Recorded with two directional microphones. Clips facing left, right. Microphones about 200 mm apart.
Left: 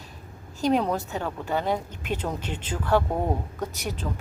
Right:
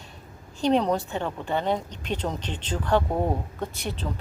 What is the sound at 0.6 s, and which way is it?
Speech, 5° left (ahead or behind).